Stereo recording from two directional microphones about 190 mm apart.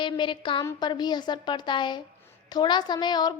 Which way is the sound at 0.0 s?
25° left (ahead or behind).